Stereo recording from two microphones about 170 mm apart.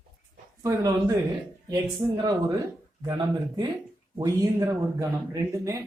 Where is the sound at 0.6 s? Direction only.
20° right (ahead or behind).